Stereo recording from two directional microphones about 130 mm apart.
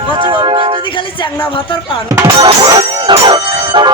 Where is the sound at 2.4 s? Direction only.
30° right (ahead or behind).